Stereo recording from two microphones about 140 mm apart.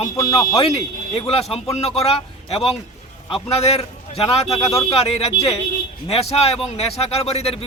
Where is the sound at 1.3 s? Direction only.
45° left (ahead or behind).